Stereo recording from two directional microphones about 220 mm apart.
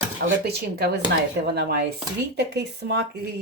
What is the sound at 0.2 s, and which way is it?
Dishes, 45° right (ahead or behind).